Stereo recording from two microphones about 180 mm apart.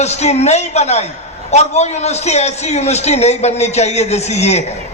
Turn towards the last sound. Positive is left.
turn(degrees=35)  # may be behind; listen again after turning